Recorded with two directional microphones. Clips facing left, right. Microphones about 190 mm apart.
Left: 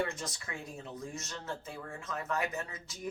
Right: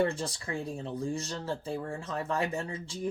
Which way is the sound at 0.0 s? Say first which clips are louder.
Right 7 dB; 30° right (ahead or behind).